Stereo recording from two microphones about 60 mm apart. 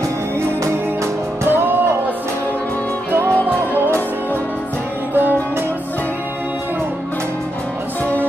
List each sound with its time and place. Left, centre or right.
1.4 s music: right
3.4 s music: right